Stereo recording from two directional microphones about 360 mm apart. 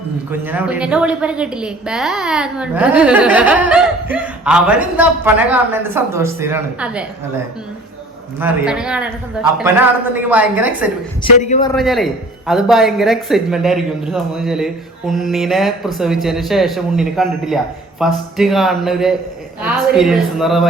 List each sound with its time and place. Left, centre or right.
0.3 s a woman's voice: centre
8.4 s a woman's voice: centre
11.2 s a man's voice: centre
11.7 s a woman's voice: centre